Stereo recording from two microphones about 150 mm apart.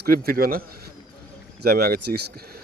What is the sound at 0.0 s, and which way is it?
Speech, 85° right.